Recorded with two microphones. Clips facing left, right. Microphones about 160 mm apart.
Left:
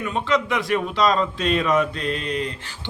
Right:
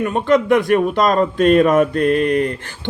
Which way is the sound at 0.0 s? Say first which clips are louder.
Right 7 dB; 50° right (ahead or behind).